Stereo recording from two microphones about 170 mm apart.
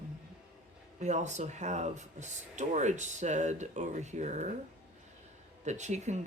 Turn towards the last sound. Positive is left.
turn(degrees=-45)  # may be behind; listen again after turning